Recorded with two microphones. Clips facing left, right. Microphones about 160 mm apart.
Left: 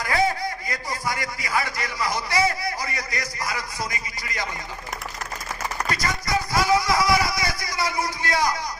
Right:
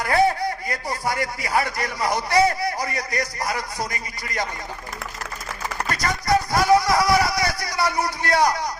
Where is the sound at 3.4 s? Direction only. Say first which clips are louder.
Right 3 dB; 60° right (ahead or behind).